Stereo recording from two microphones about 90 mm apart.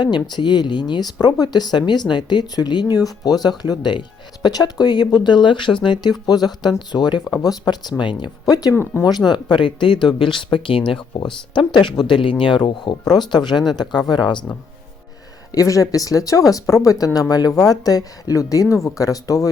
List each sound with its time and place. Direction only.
0.0 s speech: 55° left (ahead or behind)
8.7 s speech: 25° left (ahead or behind)
9.0 s speech: 50° left (ahead or behind); by 10.9 s 75° left (ahead or behind)
11.5 s speech: 60° left (ahead or behind)
15.5 s speech: 40° left (ahead or behind)